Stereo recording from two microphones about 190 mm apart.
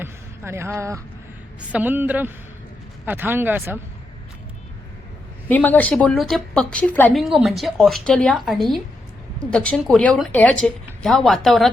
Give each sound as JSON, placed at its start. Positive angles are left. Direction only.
{"t": 0.0, "sound": "a sound", "side_deg": -15}
{"t": 1.7, "sound": "speech", "side_deg": -10}
{"t": 5.5, "sound": "speech", "side_deg": 10}